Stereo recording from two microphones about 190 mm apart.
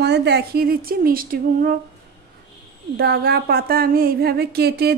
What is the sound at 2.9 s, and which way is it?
Speech, 55° right (ahead or behind).